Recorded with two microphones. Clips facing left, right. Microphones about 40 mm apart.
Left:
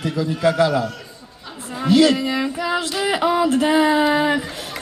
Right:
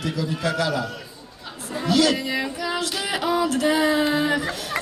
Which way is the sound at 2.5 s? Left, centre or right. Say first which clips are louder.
Left 4 dB; left.